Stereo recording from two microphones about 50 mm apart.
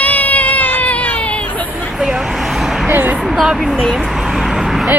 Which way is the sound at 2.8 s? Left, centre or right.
Right.